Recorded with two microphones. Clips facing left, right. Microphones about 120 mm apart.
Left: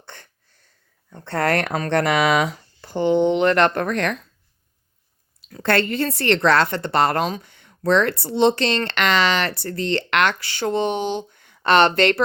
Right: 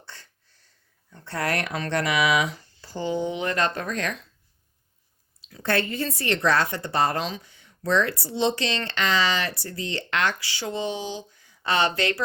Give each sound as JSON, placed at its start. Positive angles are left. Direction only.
{"t": 0.0, "sound": "a sound", "side_deg": 55}
{"t": 1.1, "sound": "speech", "side_deg": 60}
{"t": 5.6, "sound": "a woman's voice", "side_deg": 75}
{"t": 7.3, "sound": "speech", "side_deg": 55}